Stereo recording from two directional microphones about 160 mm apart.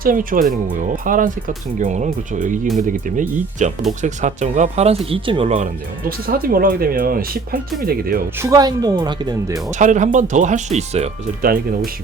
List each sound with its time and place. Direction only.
0.0 s speech: 60° right (ahead or behind); by 5.5 s 35° right (ahead or behind)
6.1 s speech: 70° right (ahead or behind)
8.4 s speech: 20° right (ahead or behind)
9.7 s speech: 50° right (ahead or behind)